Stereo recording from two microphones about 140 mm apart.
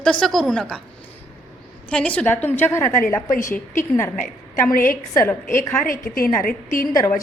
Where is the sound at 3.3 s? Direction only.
75° left (ahead or behind).